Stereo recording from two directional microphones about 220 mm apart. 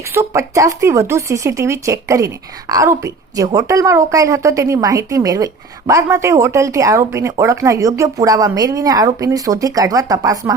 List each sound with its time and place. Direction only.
0.1 s speech: 15° right (ahead or behind)